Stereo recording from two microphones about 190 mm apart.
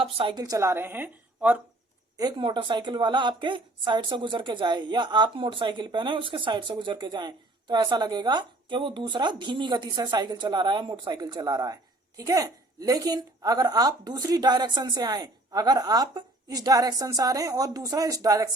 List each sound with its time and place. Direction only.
0.0 s a woman's voice: 30° right (ahead or behind); by 1.6 s 5° right (ahead or behind)
2.1 s a woman's voice: 20° right (ahead or behind)